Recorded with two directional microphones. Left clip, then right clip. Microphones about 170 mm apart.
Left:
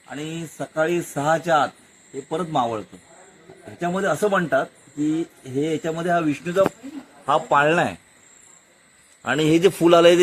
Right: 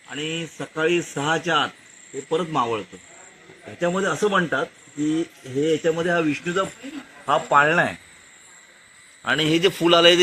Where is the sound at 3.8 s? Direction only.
25° left (ahead or behind).